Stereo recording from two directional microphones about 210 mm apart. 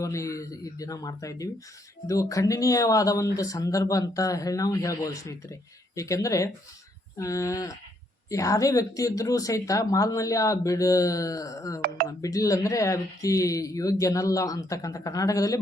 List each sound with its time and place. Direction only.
0.0 s speech: 15° left (ahead or behind)